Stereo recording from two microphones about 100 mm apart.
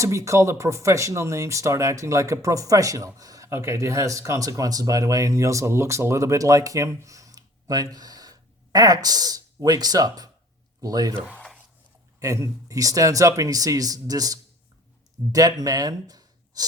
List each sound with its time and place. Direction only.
0.0 s speech: 30° right (ahead or behind)
11.3 s a sound: 10° left (ahead or behind)
12.2 s speech: 30° right (ahead or behind)